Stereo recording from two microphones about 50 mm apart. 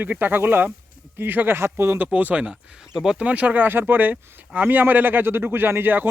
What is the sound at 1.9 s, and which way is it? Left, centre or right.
Speech, right.